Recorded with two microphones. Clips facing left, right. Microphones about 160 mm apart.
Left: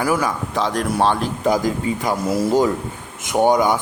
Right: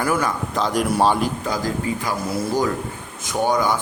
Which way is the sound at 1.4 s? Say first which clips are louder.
Left 5 dB; 20° left (ahead or behind).